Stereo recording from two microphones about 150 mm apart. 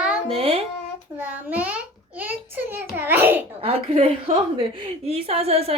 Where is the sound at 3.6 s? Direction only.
40° right (ahead or behind).